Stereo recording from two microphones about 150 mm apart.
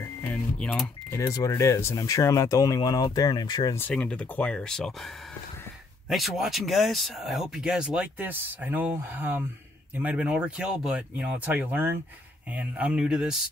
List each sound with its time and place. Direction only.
0.0 s cash register: 20° left (ahead or behind)
0.6 s speech: 5° left (ahead or behind)
1.1 s speech: 20° left (ahead or behind)
3.7 s speech: 10° left (ahead or behind)
6.0 s speech: centre (ahead or behind)